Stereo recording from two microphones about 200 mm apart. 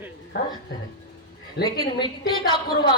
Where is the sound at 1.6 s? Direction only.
20° left (ahead or behind).